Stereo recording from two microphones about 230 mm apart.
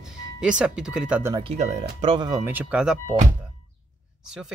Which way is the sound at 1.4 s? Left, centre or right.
Right.